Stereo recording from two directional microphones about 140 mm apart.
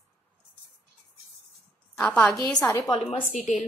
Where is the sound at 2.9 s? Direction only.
40° left (ahead or behind).